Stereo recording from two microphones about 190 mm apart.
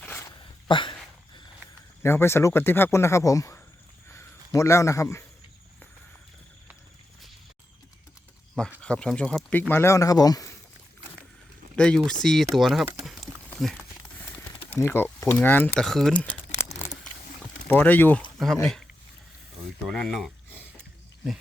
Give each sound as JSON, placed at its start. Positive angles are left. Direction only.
{"t": 0.0, "sound": "a sound", "side_deg": 10}
{"t": 0.7, "sound": "speech", "side_deg": 25}
{"t": 2.0, "sound": "speech", "side_deg": 15}
{"t": 8.8, "sound": "speech", "side_deg": 5}
{"t": 11.8, "sound": "speech", "side_deg": 5}
{"t": 13.1, "sound": "a sound", "side_deg": 0}
{"t": 14.8, "sound": "speech", "side_deg": 10}
{"t": 15.8, "sound": "crumpling", "side_deg": 0}
{"t": 17.7, "sound": "speech", "side_deg": 10}
{"t": 19.8, "sound": "speech", "side_deg": 0}